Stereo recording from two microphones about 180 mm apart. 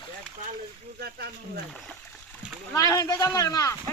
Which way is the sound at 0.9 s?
60° right (ahead or behind).